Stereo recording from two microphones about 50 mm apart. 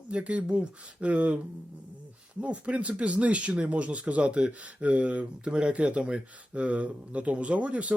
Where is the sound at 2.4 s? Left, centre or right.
Right.